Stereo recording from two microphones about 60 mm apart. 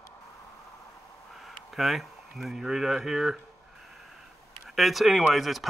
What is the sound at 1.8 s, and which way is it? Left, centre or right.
Speech, centre.